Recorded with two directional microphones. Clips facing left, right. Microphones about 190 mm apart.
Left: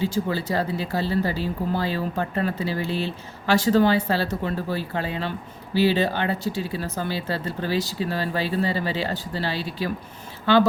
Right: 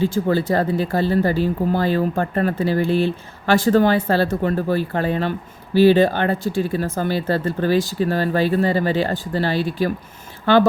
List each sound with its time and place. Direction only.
0.0 s speech: 50° right (ahead or behind)